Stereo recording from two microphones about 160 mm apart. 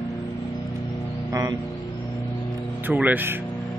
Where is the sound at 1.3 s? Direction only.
20° right (ahead or behind).